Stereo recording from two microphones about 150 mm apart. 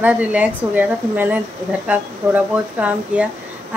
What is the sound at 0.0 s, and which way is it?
A woman's voice, 10° right (ahead or behind).